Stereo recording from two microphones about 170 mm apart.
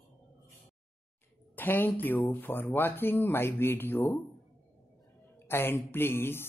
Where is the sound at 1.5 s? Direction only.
10° left (ahead or behind).